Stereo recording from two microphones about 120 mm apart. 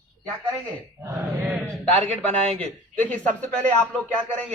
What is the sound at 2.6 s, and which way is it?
Speech, 10° left (ahead or behind).